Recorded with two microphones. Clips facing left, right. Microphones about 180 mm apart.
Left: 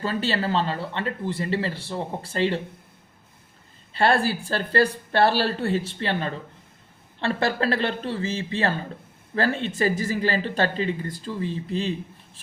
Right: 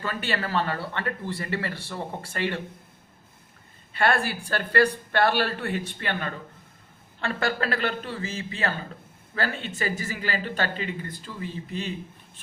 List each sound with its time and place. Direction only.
0.0 s speech: 30° left (ahead or behind)
3.9 s speech: 30° left (ahead or behind)